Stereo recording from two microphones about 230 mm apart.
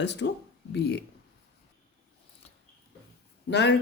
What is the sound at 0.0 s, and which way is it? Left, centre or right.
Speech, left.